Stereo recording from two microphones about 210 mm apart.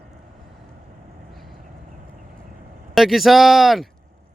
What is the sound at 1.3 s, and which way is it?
Vehicle, centre (ahead or behind).